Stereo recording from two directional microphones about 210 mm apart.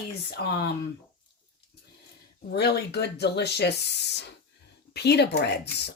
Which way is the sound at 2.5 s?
50° left (ahead or behind).